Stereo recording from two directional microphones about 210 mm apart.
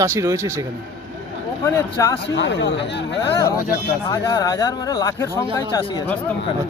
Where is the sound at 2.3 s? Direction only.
60° left (ahead or behind).